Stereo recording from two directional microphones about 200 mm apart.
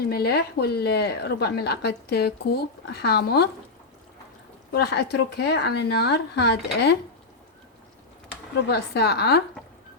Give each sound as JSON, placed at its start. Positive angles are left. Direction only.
{"t": 0.1, "sound": "speech", "side_deg": 50}
{"t": 4.7, "sound": "speech", "side_deg": 55}
{"t": 8.6, "sound": "speech", "side_deg": 55}